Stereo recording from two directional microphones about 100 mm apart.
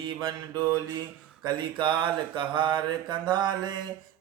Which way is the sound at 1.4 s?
50° right (ahead or behind).